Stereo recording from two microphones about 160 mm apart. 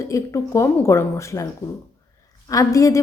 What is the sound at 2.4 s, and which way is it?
Speech, 20° left (ahead or behind).